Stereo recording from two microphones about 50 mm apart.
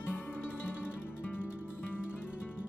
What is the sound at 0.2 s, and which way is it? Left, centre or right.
Music, left.